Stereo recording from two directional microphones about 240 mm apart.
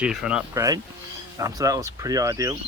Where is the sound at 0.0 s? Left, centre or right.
Centre.